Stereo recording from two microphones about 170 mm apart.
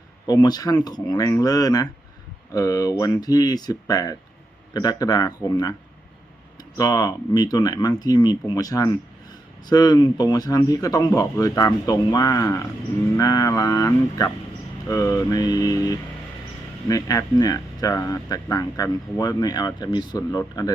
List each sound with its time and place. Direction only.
0.3 s speech: 25° left (ahead or behind)